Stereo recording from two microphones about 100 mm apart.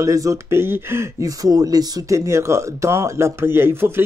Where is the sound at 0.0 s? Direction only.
35° right (ahead or behind).